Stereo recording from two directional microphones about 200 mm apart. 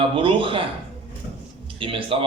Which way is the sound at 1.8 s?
25° right (ahead or behind).